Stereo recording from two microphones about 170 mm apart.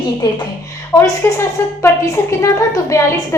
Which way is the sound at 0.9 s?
15° left (ahead or behind).